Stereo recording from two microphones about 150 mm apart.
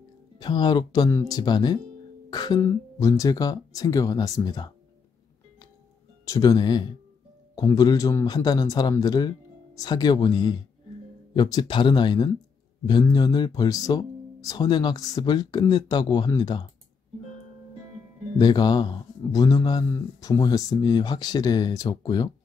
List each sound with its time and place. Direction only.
0.4 s speech: 30° left (ahead or behind)
6.2 s speech: 25° left (ahead or behind)
18.4 s speech: 30° left (ahead or behind)